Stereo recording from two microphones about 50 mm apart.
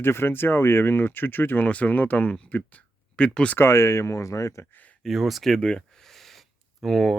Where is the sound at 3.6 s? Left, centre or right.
Left.